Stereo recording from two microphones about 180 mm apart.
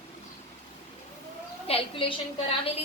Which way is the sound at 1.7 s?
30° left (ahead or behind).